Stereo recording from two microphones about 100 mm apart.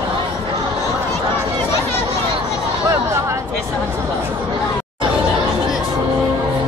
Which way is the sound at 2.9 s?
30° right (ahead or behind).